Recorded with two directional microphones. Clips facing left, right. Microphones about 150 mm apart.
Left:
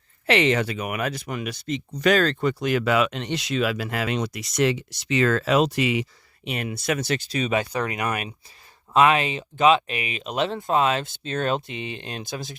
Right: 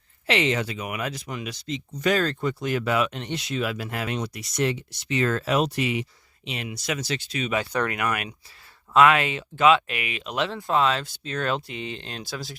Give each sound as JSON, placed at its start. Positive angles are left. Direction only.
{"t": 0.3, "sound": "speech", "side_deg": 60}
{"t": 6.4, "sound": "speech", "side_deg": 55}
{"t": 7.2, "sound": "speech", "side_deg": 40}
{"t": 7.9, "sound": "speech", "side_deg": 25}